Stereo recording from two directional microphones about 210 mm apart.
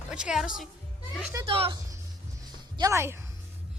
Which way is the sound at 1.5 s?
25° right (ahead or behind).